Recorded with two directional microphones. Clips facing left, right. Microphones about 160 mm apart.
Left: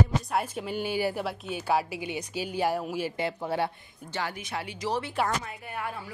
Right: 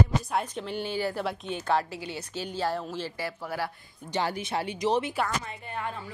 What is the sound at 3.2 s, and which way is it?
Speech, 20° left (ahead or behind).